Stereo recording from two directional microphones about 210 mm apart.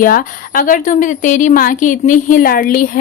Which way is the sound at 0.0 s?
40° left (ahead or behind).